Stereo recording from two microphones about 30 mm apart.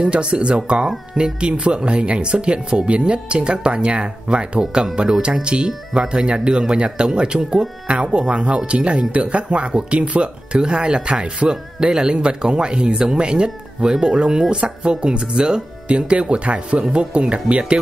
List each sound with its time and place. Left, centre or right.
0.0 s speech: right
9.9 s speech: right
15.9 s speech: right